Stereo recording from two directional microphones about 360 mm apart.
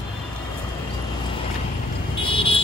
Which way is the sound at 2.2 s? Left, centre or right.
Centre.